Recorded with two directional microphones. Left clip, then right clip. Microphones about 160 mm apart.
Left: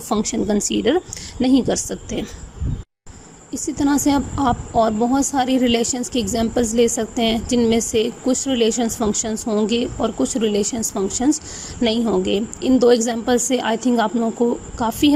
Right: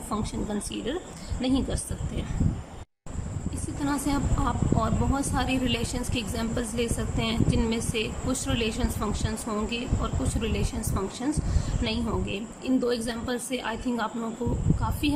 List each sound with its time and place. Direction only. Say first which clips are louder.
0.1 s a woman's voice: left 12 dB; 45° left (ahead or behind)
3.5 s a woman's voice: left 11 dB; 45° left (ahead or behind)